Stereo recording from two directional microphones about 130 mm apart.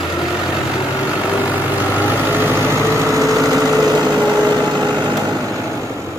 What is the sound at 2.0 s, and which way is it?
Vehicle, 15° right (ahead or behind).